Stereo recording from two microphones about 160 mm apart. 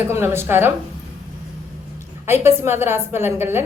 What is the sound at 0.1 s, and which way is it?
Speech, 15° right (ahead or behind).